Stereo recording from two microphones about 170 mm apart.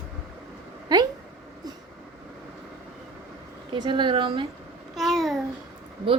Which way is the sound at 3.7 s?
25° right (ahead or behind).